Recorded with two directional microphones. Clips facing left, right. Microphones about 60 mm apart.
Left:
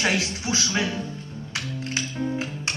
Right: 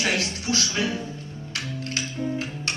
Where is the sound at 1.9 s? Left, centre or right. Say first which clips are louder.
Left 1 dB; centre.